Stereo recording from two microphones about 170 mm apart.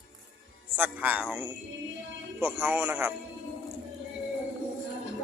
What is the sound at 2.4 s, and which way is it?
Speech, 10° right (ahead or behind).